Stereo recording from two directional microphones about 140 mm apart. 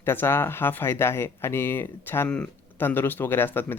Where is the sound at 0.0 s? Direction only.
15° left (ahead or behind).